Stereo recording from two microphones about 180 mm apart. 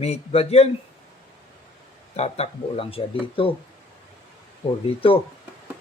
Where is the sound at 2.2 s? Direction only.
35° left (ahead or behind).